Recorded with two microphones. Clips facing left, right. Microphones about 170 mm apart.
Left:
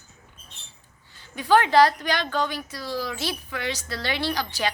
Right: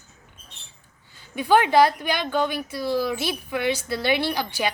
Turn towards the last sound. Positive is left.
turn(degrees=-15)  # may be behind; listen again after turning